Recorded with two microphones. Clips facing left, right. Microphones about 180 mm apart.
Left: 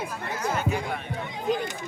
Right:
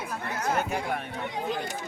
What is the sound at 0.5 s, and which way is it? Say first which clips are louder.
Music: even; 55° right (ahead or behind).